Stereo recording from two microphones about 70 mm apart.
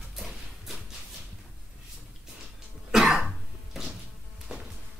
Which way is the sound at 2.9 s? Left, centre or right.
Centre.